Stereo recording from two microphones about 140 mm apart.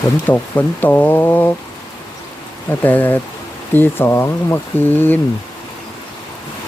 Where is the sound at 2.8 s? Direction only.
15° left (ahead or behind).